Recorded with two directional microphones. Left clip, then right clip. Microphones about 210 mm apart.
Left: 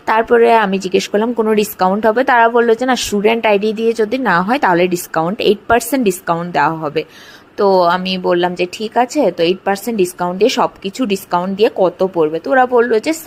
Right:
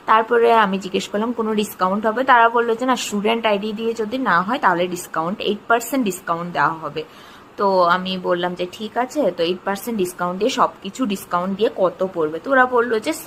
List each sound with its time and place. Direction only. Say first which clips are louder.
0.0 s speech: left 4 dB; 25° left (ahead or behind)